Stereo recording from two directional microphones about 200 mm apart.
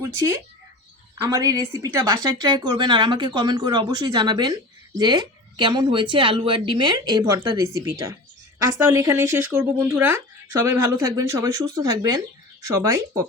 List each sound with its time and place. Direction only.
0.0 s speech: 15° right (ahead or behind)